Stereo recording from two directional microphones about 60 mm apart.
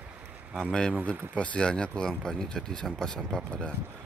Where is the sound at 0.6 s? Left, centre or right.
Centre.